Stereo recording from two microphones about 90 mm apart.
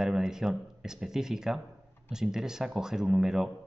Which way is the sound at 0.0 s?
5° right (ahead or behind).